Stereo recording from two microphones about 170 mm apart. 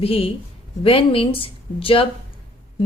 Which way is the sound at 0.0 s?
35° left (ahead or behind).